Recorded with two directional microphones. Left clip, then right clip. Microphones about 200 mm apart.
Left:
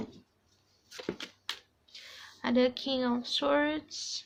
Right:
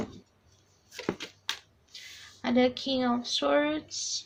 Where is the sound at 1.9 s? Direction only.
35° left (ahead or behind).